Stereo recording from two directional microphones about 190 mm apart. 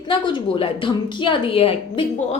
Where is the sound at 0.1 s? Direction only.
25° left (ahead or behind).